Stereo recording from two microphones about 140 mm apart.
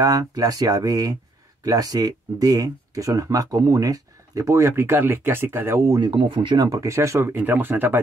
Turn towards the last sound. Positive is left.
turn(degrees=-15)  # may be behind; listen again after turning